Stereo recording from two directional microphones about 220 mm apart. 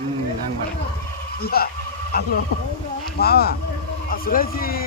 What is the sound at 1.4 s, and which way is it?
Speech, 45° left (ahead or behind).